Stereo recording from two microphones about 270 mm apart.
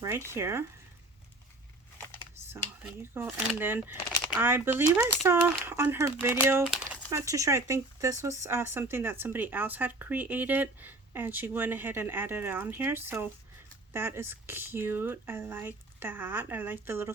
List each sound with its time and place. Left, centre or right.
0.0 s speech: centre
3.0 s speech: centre